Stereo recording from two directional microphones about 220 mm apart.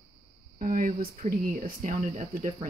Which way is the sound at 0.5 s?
40° right (ahead or behind).